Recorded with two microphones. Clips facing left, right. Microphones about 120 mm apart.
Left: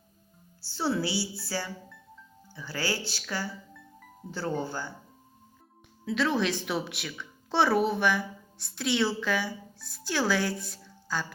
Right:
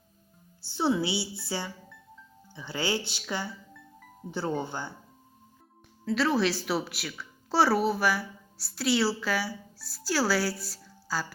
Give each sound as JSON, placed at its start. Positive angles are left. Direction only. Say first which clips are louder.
{"t": 0.6, "sound": "speech", "louder": "right 2 dB", "side_deg": -20}
{"t": 3.8, "sound": "music", "louder": "even", "side_deg": 0}
{"t": 4.3, "sound": "speech", "louder": "right 1 dB", "side_deg": -20}
{"t": 6.1, "sound": "a woman's voice", "louder": "right 1 dB", "side_deg": -5}